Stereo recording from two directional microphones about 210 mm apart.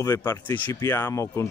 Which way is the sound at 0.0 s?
10° left (ahead or behind).